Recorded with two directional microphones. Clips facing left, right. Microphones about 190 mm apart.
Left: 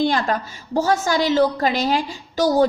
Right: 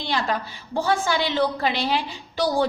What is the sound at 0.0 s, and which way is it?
A woman's voice, 50° left (ahead or behind).